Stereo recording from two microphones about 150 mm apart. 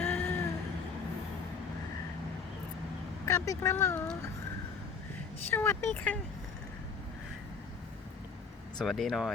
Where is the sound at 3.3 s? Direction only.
20° left (ahead or behind).